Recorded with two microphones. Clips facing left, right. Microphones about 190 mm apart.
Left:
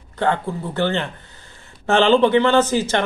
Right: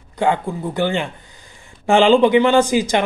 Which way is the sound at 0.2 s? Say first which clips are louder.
Right 2 dB; 10° right (ahead or behind).